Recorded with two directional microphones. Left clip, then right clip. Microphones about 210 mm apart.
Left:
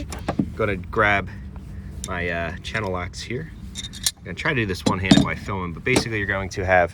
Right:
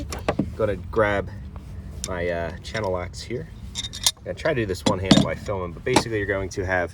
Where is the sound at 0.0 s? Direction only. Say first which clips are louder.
Right 1 dB; centre (ahead or behind).